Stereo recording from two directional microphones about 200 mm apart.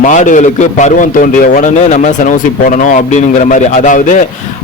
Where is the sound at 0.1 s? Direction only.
40° left (ahead or behind).